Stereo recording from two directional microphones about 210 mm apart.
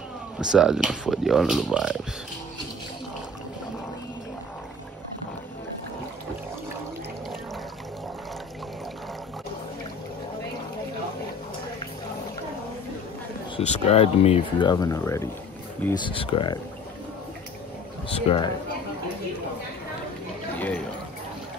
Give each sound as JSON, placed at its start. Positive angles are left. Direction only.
{"t": 0.4, "sound": "speech", "side_deg": -5}
{"t": 13.6, "sound": "speech", "side_deg": 30}
{"t": 16.0, "sound": "speech", "side_deg": 25}
{"t": 18.1, "sound": "speech", "side_deg": 25}
{"t": 20.5, "sound": "a sound", "side_deg": 5}